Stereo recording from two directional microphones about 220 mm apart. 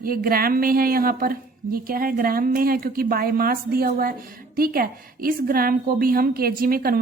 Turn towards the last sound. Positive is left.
turn(degrees=-40)  # may be behind; listen again after turning